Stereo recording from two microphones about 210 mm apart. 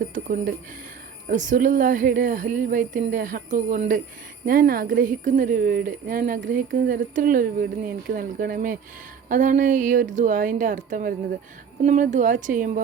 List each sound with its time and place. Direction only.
0.1 s a woman's voice: 40° right (ahead or behind)